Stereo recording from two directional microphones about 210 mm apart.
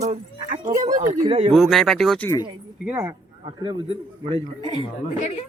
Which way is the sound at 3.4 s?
20° right (ahead or behind).